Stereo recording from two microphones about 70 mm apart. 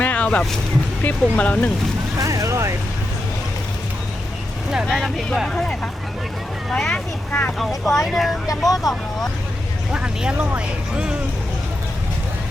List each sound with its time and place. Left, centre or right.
0.0 s vehicle: left
1.0 s speech: centre
2.1 s boat: right
4.9 s speech: centre
7.3 s speech: left
7.6 s speech: centre
8.4 s speech: left
8.8 s speech: centre
9.9 s speech: centre